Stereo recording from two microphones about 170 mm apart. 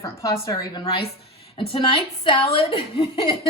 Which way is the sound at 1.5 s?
35° left (ahead or behind).